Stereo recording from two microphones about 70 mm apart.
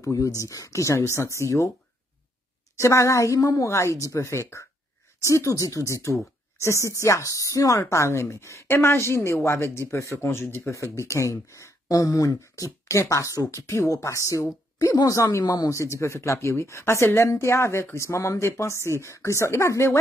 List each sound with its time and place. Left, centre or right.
0.0 s speech: left
2.8 s speech: left
10.7 s speech: left
15.7 s speech: left